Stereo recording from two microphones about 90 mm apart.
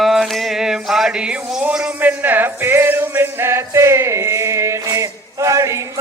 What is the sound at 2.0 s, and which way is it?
Music, 20° right (ahead or behind).